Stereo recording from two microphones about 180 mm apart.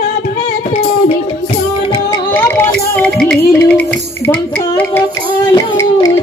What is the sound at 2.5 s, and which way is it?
Music, 5° left (ahead or behind).